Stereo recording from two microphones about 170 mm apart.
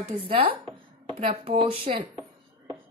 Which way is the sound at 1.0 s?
35° right (ahead or behind).